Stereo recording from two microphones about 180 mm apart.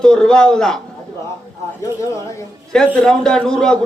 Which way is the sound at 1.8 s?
15° left (ahead or behind).